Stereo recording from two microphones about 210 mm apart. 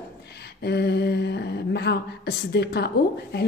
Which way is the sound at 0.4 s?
50° left (ahead or behind).